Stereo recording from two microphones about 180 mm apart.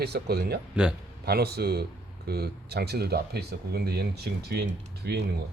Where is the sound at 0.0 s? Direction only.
65° right (ahead or behind).